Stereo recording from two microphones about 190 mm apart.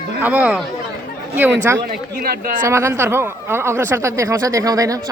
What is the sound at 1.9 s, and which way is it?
Speech, 50° right (ahead or behind).